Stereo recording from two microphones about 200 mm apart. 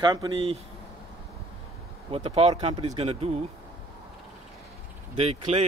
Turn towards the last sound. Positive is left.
turn(degrees=-35)  # may be behind; listen again after turning